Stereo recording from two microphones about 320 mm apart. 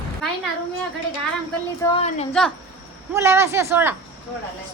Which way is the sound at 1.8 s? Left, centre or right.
Centre.